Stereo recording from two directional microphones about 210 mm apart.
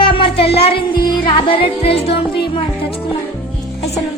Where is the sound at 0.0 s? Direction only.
25° left (ahead or behind).